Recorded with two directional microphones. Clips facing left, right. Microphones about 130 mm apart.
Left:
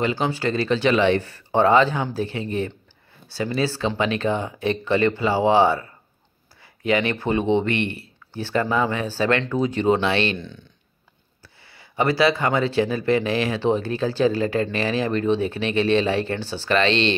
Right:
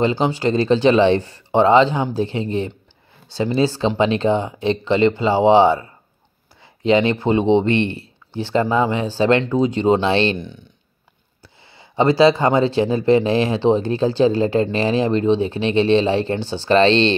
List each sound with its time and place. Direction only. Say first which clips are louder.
0.0 s speech: right 5 dB; 25° right (ahead or behind)
10.3 s speech: right 4 dB; 15° right (ahead or behind); by 17.1 s 30° right (ahead or behind)